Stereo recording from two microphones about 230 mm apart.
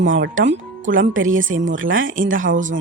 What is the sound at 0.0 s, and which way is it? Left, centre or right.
A woman's voice, right.